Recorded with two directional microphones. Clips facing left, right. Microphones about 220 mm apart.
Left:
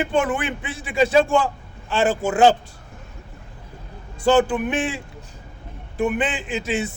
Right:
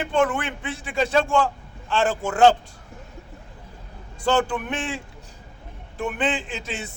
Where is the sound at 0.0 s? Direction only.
5° left (ahead or behind).